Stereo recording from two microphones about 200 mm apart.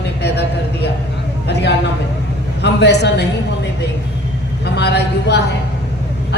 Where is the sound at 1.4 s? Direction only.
55° left (ahead or behind).